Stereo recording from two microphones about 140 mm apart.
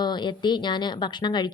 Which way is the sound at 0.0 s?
30° left (ahead or behind).